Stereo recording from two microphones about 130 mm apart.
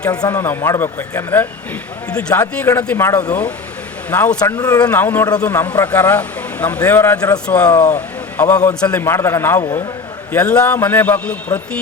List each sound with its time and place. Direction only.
0.1 s a man's voice: 30° left (ahead or behind)
3.1 s speech: 30° left (ahead or behind)
4.1 s a man's voice: 15° left (ahead or behind)
4.4 s speech: 25° left (ahead or behind)
4.9 s a man's voice: 15° left (ahead or behind)
7.9 s a sound: 15° left (ahead or behind)
8.8 s a man's voice: 15° left (ahead or behind)